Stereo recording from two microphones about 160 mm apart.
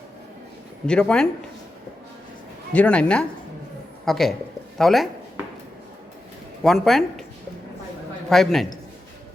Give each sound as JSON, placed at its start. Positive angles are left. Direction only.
{"t": 0.9, "sound": "speech", "side_deg": 5}
{"t": 2.7, "sound": "speech", "side_deg": 10}
{"t": 6.6, "sound": "speech", "side_deg": 0}
{"t": 8.3, "sound": "speech", "side_deg": 0}